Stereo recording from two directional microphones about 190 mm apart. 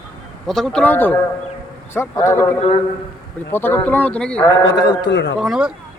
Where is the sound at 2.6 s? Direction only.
30° left (ahead or behind).